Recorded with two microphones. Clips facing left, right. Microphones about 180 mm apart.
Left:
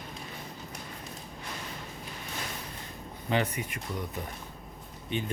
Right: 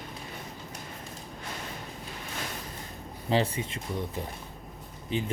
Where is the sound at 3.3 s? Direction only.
30° right (ahead or behind).